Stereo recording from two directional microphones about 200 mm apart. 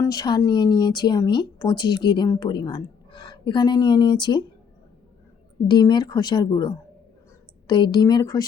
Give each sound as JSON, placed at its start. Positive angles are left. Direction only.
{"t": 0.0, "sound": "speech", "side_deg": 20}
{"t": 5.6, "sound": "speech", "side_deg": 20}